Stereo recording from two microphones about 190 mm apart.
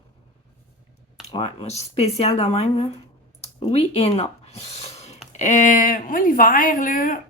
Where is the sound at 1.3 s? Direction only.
30° left (ahead or behind).